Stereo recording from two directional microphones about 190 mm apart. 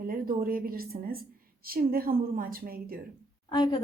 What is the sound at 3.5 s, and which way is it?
Speech, 25° left (ahead or behind).